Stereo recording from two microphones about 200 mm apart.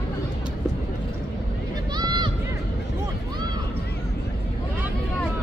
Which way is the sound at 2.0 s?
20° right (ahead or behind).